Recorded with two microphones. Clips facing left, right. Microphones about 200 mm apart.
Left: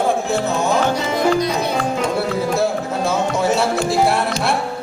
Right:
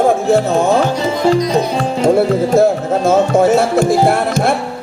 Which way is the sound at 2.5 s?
50° right (ahead or behind).